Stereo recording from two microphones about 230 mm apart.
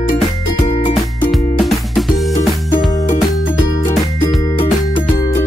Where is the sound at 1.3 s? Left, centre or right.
Centre.